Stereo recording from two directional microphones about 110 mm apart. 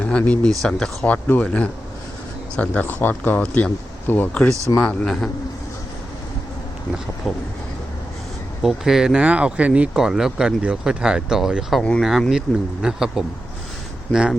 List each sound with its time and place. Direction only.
0.0 s speech: 10° left (ahead or behind)
7.3 s speech: centre (ahead or behind)
8.6 s speech: 5° right (ahead or behind)
11.8 s speech: 10° left (ahead or behind)
12.0 s speech: centre (ahead or behind)